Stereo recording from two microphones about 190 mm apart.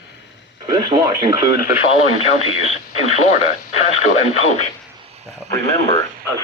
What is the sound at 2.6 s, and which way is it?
Speech, 35° left (ahead or behind).